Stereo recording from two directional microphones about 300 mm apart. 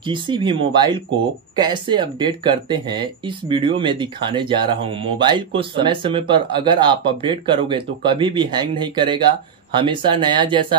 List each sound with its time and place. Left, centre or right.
0.0 s speech: centre